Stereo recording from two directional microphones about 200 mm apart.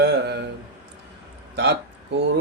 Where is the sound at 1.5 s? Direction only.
55° right (ahead or behind).